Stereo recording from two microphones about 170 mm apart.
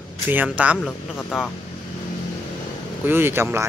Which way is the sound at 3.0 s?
15° right (ahead or behind).